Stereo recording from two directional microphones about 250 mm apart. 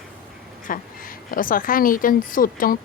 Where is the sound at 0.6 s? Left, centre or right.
Left.